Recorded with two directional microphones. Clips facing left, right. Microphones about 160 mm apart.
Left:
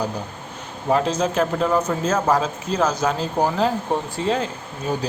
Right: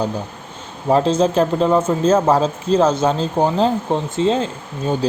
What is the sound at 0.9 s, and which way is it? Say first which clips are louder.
Speech: right 5 dB; 30° right (ahead or behind).